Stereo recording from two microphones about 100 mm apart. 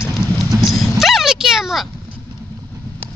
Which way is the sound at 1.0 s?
5° right (ahead or behind).